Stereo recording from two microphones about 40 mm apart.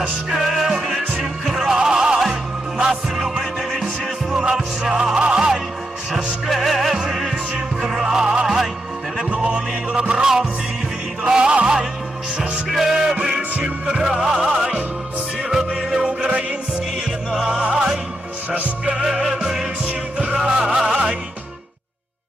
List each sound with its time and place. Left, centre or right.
0.3 s music: centre
6.5 s music: centre
8.4 s music: centre
9.9 s music: right
10.2 s music: centre
11.3 s music: right
12.6 s music: centre
12.9 s music: right
14.3 s music: centre
17.7 s music: centre
20.2 s music: right